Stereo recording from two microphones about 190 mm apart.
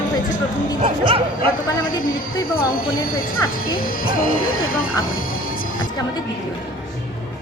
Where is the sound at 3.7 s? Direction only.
50° left (ahead or behind).